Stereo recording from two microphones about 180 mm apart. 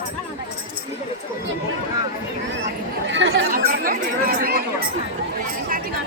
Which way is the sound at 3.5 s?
50° right (ahead or behind).